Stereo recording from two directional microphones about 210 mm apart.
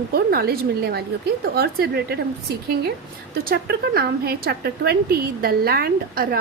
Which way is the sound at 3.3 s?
45° right (ahead or behind).